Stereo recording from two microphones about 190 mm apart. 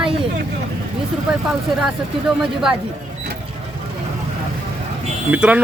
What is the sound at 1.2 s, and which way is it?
Speech, 5° right (ahead or behind).